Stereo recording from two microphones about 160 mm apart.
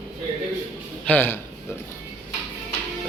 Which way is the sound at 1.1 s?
15° left (ahead or behind).